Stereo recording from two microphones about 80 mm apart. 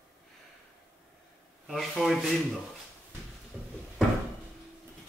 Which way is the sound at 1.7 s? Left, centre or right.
Centre.